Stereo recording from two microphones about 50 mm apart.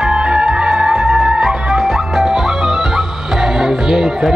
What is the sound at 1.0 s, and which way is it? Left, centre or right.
Music, centre.